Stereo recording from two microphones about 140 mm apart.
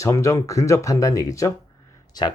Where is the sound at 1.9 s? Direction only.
30° left (ahead or behind).